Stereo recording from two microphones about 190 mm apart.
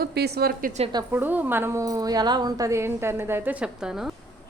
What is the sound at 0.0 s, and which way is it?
Speech, 60° right (ahead or behind).